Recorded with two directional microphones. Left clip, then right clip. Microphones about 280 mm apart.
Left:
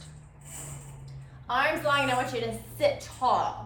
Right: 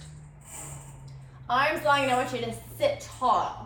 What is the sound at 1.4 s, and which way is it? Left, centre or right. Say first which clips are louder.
A woman's voice: right 2 dB; centre.